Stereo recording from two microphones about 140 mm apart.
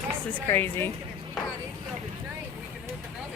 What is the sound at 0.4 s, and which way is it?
Speech, 15° left (ahead or behind).